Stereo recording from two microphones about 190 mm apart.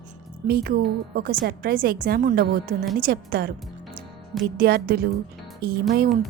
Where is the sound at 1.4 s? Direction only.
55° right (ahead or behind).